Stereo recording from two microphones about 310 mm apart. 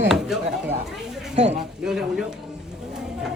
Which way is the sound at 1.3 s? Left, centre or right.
Centre.